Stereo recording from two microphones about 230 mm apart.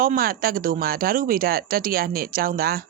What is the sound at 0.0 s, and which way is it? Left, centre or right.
A woman's voice, right.